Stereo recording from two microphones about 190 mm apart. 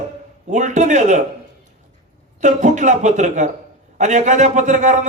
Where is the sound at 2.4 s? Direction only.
40° right (ahead or behind).